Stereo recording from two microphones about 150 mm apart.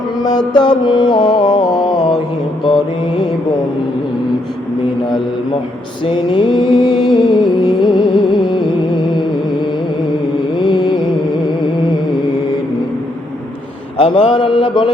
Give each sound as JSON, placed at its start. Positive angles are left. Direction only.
{"t": 0.2, "sound": "music", "side_deg": 30}
{"t": 6.1, "sound": "music", "side_deg": 30}
{"t": 10.6, "sound": "mantra", "side_deg": 30}
{"t": 14.0, "sound": "mantra", "side_deg": 35}